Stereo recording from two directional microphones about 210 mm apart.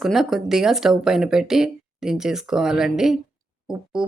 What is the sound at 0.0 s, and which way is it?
Speech, centre (ahead or behind).